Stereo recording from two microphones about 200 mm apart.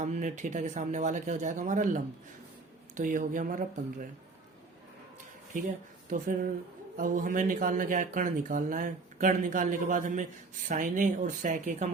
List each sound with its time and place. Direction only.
0.0 s a man's voice: 40° right (ahead or behind)
6.1 s a man's voice: 45° right (ahead or behind)